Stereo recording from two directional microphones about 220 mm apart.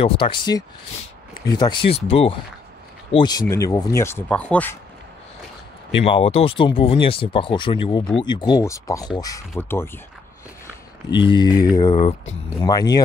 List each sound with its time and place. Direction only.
0.0 s speech: 25° left (ahead or behind); by 4.7 s 5° left (ahead or behind)
6.0 s speech: 25° left (ahead or behind); by 9.8 s 10° left (ahead or behind)
11.1 s speech: 20° left (ahead or behind)
12.6 s speech: 15° left (ahead or behind)